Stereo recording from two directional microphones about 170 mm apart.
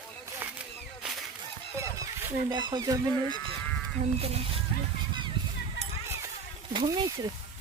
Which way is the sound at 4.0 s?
35° right (ahead or behind).